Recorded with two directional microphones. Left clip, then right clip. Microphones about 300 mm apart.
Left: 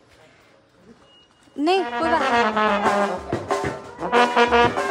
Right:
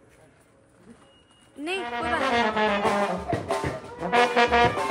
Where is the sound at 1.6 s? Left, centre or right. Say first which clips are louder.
Left 8 dB; left.